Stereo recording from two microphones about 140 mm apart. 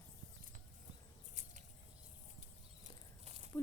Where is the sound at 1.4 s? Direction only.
60° right (ahead or behind).